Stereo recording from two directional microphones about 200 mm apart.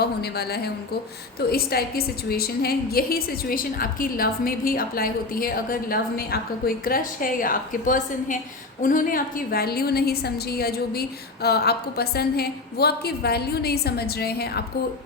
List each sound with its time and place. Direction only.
0.0 s a woman's voice: 55° left (ahead or behind)